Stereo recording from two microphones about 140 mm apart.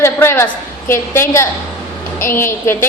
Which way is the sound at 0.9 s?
20° left (ahead or behind).